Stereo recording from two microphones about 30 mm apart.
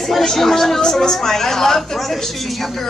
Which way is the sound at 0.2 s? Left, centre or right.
Centre.